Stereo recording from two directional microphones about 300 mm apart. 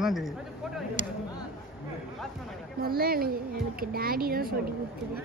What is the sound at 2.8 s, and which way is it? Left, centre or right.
Speech, right.